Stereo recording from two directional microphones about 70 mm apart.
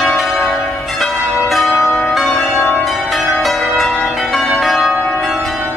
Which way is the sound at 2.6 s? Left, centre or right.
Left.